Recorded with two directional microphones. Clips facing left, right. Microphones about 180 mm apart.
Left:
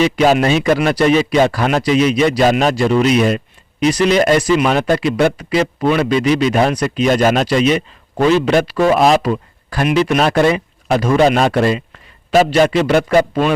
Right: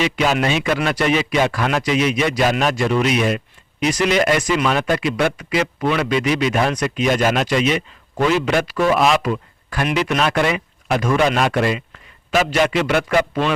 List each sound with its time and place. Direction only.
0.0 s speech: 35° left (ahead or behind)
9.8 s speech: 25° left (ahead or behind)
10.2 s speech: 35° left (ahead or behind)